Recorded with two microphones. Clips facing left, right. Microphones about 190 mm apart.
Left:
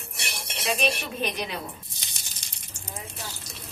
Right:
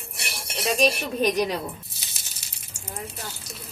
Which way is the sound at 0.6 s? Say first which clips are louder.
Right 5 dB; 40° right (ahead or behind).